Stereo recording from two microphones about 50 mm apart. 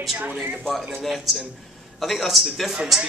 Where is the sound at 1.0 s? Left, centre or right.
Centre.